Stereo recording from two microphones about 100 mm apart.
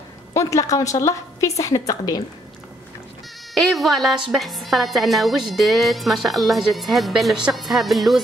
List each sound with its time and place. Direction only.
0.3 s a woman's voice: 30° left (ahead or behind)
3.5 s a woman's voice: centre (ahead or behind)